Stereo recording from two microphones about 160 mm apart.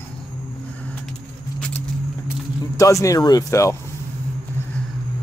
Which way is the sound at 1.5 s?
5° left (ahead or behind).